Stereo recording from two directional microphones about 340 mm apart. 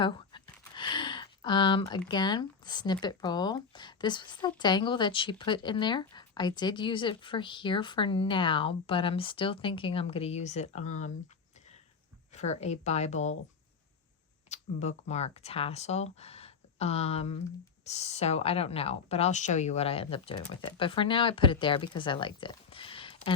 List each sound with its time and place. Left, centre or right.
0.0 s a sound: centre
0.8 s speech: centre
12.3 s speech: centre
14.5 s speech: centre